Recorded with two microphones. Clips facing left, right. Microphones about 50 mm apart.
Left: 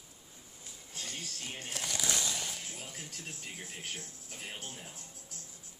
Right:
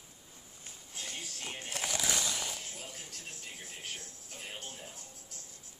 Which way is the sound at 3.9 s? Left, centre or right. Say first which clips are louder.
Left 1 dB; centre.